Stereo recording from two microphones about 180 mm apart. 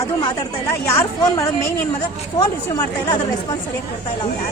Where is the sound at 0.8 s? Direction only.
15° left (ahead or behind).